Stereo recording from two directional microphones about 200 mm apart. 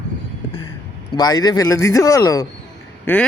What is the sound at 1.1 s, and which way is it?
A man's voice, 20° left (ahead or behind).